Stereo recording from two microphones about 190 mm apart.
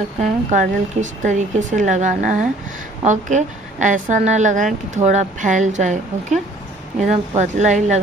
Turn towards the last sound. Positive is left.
turn(degrees=-40)  # may be behind; listen again after turning